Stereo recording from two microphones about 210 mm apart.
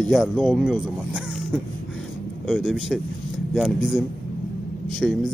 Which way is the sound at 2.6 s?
5° right (ahead or behind).